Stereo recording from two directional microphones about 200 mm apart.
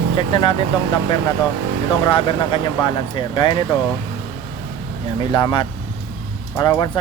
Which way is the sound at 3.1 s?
25° left (ahead or behind).